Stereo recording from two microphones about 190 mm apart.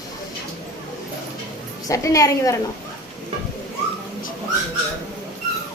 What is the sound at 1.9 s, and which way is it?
Speech, 15° left (ahead or behind).